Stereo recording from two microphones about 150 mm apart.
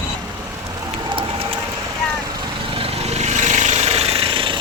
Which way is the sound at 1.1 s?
35° right (ahead or behind).